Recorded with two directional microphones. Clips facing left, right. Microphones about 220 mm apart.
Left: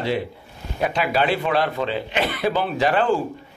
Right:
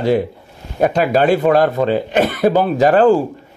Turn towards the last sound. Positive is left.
turn(degrees=-40)  # may be behind; listen again after turning